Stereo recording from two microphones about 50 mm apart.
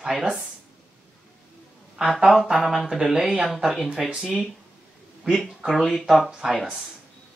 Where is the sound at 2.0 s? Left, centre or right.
Centre.